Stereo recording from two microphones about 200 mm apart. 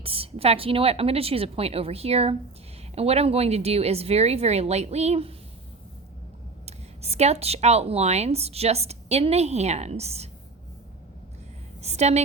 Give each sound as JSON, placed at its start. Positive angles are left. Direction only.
{"t": 0.0, "sound": "a woman's voice", "side_deg": -30}
{"t": 6.7, "sound": "speech", "side_deg": -30}
{"t": 11.8, "sound": "a woman's voice", "side_deg": -35}